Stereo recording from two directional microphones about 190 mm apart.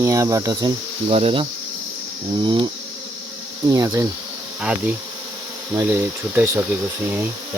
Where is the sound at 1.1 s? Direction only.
30° right (ahead or behind).